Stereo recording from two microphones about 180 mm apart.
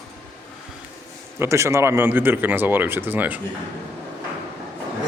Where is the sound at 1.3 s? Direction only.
15° right (ahead or behind).